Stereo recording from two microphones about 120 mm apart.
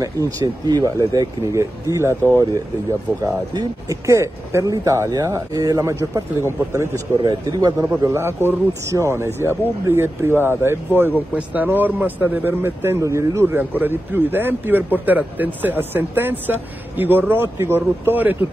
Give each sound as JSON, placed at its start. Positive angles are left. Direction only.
{"t": 0.0, "sound": "speech", "side_deg": -30}